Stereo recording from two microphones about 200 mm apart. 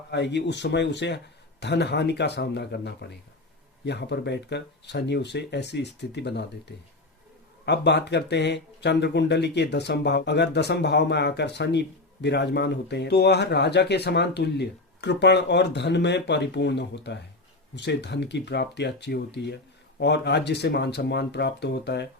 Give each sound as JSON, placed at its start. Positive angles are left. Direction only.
{"t": 0.1, "sound": "speech", "side_deg": 60}